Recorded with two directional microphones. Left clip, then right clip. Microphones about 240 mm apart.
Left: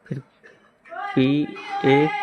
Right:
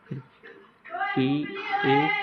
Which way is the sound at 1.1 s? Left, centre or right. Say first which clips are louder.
Left 5 dB; left.